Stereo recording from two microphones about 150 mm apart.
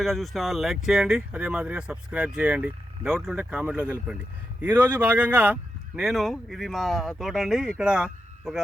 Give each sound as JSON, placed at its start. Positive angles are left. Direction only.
{"t": 0.0, "sound": "speech", "side_deg": 0}